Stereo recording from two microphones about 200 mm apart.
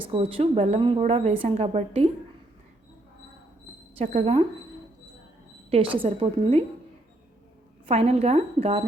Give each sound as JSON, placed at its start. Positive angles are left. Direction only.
{"t": 0.0, "sound": "a woman's voice", "side_deg": -25}
{"t": 3.9, "sound": "speech", "side_deg": -30}
{"t": 5.7, "sound": "a woman's voice", "side_deg": -25}
{"t": 7.9, "sound": "speech", "side_deg": -30}